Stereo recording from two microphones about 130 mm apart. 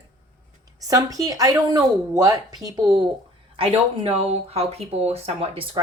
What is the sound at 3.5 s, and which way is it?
Speech, 45° right (ahead or behind).